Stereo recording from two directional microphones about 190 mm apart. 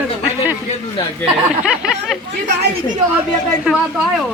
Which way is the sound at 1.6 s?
5° right (ahead or behind).